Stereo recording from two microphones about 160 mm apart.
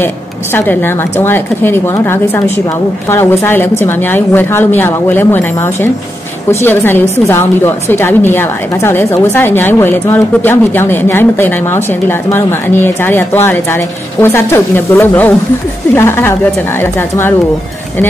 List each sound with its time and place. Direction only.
0.6 s a woman's voice: 15° left (ahead or behind)